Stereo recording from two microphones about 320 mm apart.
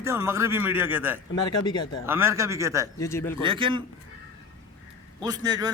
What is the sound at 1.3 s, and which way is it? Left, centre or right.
Speech, centre.